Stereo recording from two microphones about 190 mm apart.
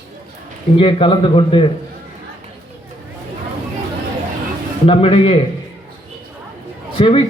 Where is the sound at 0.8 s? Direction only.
30° left (ahead or behind).